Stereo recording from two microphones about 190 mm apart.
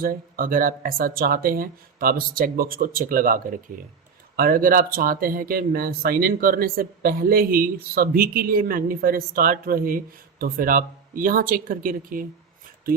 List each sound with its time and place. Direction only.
0.0 s speech: 50° right (ahead or behind)